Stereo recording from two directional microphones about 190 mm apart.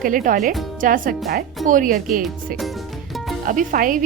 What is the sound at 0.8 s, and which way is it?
A woman's voice, 45° right (ahead or behind).